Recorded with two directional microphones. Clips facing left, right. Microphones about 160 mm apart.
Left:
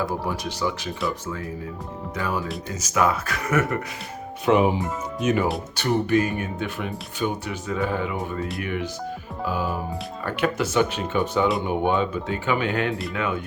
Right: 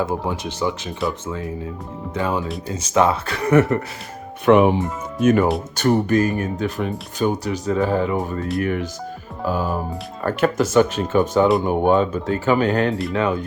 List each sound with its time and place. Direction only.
0.0 s speech: 20° right (ahead or behind)
2.1 s speech: 25° right (ahead or behind)
4.4 s speech: 65° right (ahead or behind)
5.2 s speech: 50° right (ahead or behind); by 13.4 s 35° right (ahead or behind)